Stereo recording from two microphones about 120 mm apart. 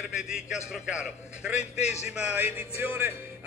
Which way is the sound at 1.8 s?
70° left (ahead or behind).